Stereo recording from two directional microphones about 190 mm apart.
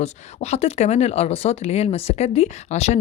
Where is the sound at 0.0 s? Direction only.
35° left (ahead or behind).